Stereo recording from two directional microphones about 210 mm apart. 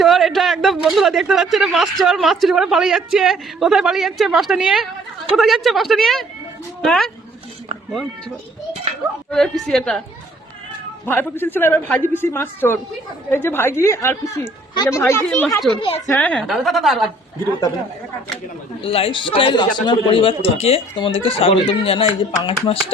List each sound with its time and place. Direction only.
0.0 s speech: centre (ahead or behind)
9.3 s speech: centre (ahead or behind)
11.0 s speech: 10° left (ahead or behind)
18.8 s a man's voice: 25° left (ahead or behind)